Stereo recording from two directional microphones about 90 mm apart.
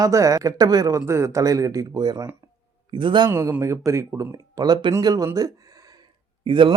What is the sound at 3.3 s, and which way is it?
Speech, 25° right (ahead or behind).